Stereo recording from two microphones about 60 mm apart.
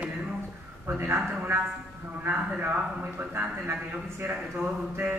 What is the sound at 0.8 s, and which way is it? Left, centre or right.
Speech, right.